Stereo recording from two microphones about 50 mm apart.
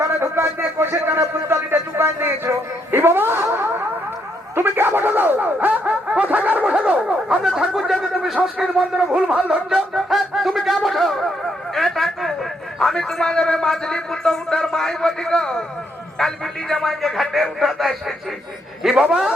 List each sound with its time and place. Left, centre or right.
0.2 s a man's voice: right
4.5 s a sound: right
6.7 s dog: right
7.1 s a sound: centre
8.5 s speech: centre
9.4 s music: centre
13.2 s a man's voice: centre